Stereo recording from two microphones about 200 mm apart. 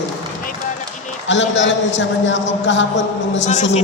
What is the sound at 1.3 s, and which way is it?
A woman's voice, 65° left (ahead or behind).